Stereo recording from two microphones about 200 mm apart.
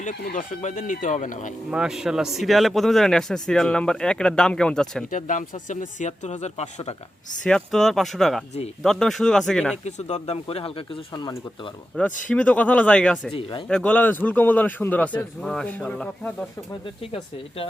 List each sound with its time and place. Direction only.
0.3 s speech: 40° left (ahead or behind)
1.7 s speech: 5° right (ahead or behind)
5.1 s speech: 40° left (ahead or behind)
7.4 s speech: 5° left (ahead or behind)
9.8 s speech: 35° left (ahead or behind)
11.9 s speech: 5° left (ahead or behind)
13.3 s speech: 25° left (ahead or behind)
13.7 s speech: 5° left (ahead or behind)